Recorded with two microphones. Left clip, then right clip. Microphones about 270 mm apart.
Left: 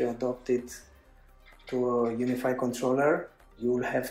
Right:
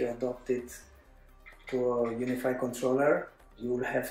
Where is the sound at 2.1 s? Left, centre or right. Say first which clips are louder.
Left 2 dB; centre.